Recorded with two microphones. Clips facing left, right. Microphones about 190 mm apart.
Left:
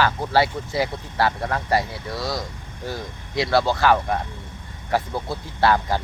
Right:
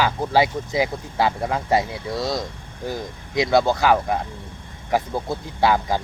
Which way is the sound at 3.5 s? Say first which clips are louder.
Right 1 dB; 20° right (ahead or behind).